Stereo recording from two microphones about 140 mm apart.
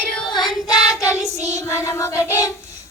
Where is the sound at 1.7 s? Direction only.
20° left (ahead or behind).